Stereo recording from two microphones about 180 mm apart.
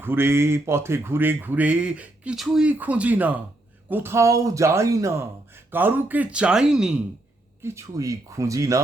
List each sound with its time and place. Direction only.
0.0 s speech: 15° right (ahead or behind)
7.6 s speech: 15° right (ahead or behind)